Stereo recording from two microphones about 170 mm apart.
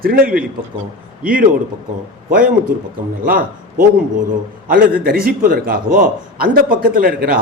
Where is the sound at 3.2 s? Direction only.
60° right (ahead or behind).